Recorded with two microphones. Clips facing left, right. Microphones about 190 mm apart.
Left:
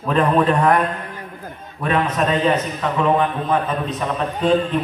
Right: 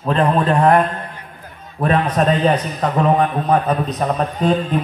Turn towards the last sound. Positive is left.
turn(degrees=-40)  # may be behind; listen again after turning